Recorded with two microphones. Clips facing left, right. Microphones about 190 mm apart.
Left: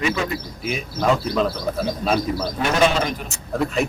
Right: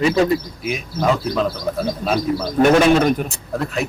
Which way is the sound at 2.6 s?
50° right (ahead or behind).